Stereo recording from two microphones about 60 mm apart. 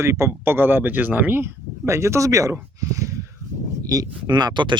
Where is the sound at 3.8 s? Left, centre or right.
Right.